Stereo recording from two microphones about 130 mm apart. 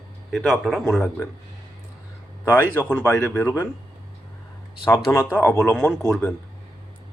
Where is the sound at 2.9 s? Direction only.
10° left (ahead or behind).